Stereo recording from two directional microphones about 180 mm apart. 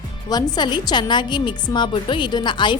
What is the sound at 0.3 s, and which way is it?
A woman's voice, 20° left (ahead or behind).